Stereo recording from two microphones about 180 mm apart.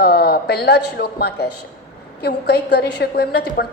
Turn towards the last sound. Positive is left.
turn(degrees=65)  # may be behind; listen again after turning